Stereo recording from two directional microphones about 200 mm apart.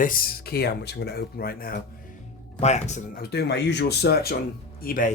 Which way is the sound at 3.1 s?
55° left (ahead or behind).